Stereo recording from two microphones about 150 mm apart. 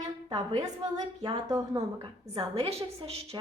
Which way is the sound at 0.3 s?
30° right (ahead or behind).